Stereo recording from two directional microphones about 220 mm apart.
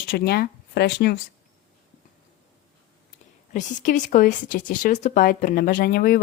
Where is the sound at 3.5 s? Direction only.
35° left (ahead or behind).